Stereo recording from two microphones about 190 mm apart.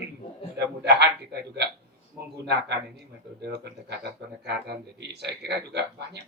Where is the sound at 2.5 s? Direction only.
60° right (ahead or behind).